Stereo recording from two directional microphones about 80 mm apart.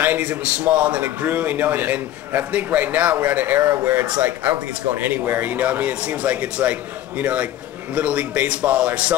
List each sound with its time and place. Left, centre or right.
0.0 s a man's voice: centre